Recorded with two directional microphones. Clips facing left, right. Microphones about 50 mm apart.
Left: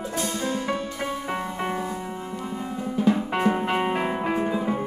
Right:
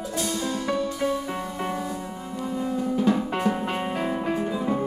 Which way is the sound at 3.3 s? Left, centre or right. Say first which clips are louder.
Left 2 dB; left.